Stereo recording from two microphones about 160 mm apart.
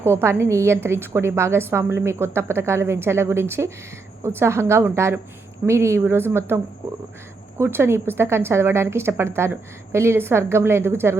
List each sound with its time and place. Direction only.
0.0 s a woman's voice: 15° right (ahead or behind)
7.6 s a woman's voice: 15° right (ahead or behind)